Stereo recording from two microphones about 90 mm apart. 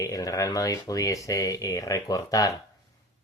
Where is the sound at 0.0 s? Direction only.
40° left (ahead or behind).